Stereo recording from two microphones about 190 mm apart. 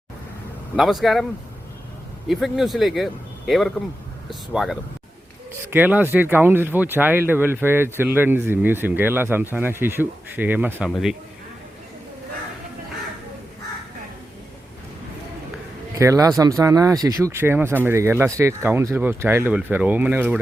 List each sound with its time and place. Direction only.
0.8 s a man's voice: centre (ahead or behind)
16.0 s speech: 15° right (ahead or behind)